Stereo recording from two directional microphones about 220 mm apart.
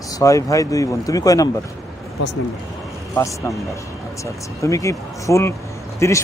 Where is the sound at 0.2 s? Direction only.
15° left (ahead or behind).